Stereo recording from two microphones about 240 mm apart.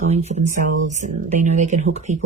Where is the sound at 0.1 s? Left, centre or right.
Right.